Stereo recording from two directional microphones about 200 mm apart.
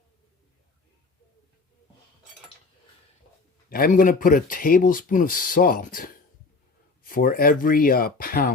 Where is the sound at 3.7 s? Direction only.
45° left (ahead or behind).